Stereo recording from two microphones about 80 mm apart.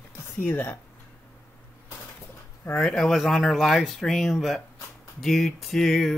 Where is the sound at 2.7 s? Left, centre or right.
Centre.